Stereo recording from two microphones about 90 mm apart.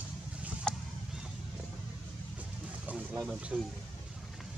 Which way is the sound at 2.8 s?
15° right (ahead or behind).